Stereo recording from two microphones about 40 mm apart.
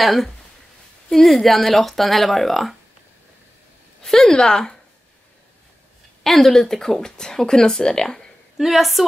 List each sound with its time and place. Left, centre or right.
0.0 s speech: centre
4.0 s speech: centre
6.2 s speech: centre
8.5 s speech: centre